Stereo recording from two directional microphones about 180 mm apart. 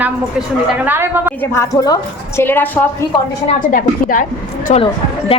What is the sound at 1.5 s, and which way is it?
A woman's voice, 20° left (ahead or behind).